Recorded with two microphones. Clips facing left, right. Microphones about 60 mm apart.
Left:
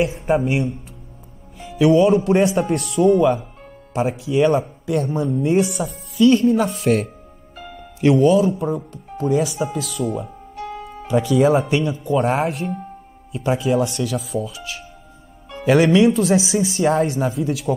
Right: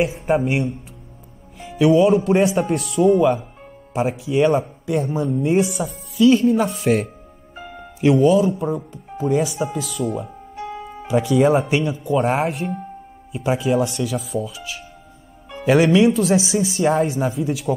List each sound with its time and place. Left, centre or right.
0.0 s speech: centre
7.5 s music: centre
8.0 s speech: centre
10.5 s speech: centre